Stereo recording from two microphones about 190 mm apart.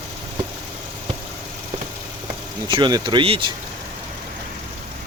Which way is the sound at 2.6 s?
25° right (ahead or behind).